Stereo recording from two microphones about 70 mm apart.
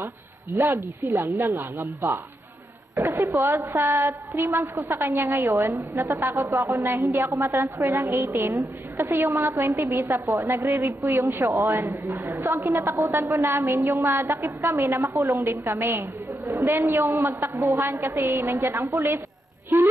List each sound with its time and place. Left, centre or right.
0.7 s a woman's voice: right
3.0 s a woman's voice: right
3.7 s a woman's voice: right
5.4 s a woman's voice: right
6.7 s a woman's voice: right
7.5 s a woman's voice: right